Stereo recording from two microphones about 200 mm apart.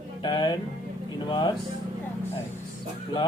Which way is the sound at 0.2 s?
20° left (ahead or behind).